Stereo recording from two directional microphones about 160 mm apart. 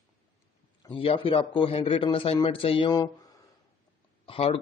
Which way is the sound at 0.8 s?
35° left (ahead or behind).